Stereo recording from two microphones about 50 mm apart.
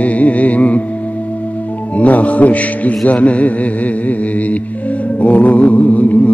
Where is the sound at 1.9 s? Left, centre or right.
Left.